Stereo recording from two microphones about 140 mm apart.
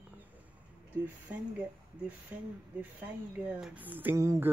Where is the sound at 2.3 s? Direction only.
15° right (ahead or behind).